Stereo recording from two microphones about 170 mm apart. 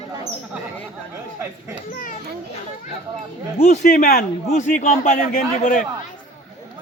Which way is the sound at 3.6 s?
50° left (ahead or behind).